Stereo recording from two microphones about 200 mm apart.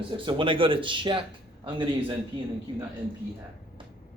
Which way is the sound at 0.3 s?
25° right (ahead or behind).